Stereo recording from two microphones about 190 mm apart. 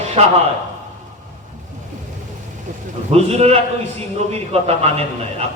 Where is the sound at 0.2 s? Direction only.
35° right (ahead or behind).